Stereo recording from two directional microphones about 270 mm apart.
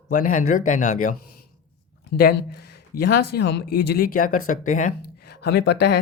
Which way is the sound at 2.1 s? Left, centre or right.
Left.